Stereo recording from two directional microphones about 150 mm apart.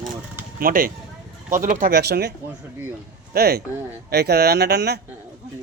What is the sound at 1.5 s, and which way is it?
Speech, 60° right (ahead or behind).